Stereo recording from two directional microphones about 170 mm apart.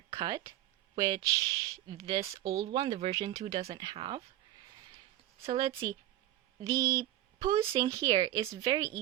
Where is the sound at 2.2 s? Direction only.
35° right (ahead or behind).